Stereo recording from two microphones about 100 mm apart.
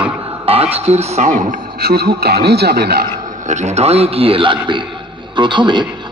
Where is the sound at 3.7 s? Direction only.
90° right.